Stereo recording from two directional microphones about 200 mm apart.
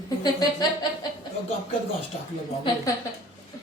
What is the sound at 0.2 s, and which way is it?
Speech, 20° left (ahead or behind).